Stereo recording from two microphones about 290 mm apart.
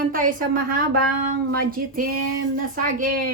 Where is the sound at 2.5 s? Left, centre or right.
Right.